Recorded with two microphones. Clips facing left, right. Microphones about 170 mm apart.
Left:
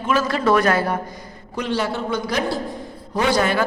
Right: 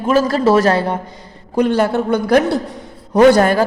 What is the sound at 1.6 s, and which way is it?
A woman's voice, 55° right (ahead or behind).